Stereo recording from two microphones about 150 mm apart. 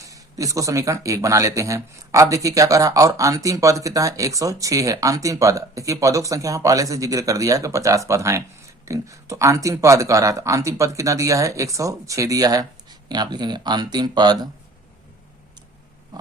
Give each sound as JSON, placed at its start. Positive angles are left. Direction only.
{"t": 0.0, "sound": "speech", "side_deg": -20}